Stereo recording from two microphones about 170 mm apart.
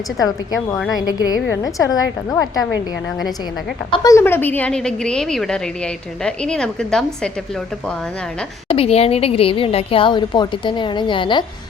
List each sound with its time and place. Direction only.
0.2 s a woman's voice: 20° left (ahead or behind)
3.9 s a woman's voice: 20° left (ahead or behind); by 7.3 s 5° left (ahead or behind)
8.6 s speech: 35° left (ahead or behind)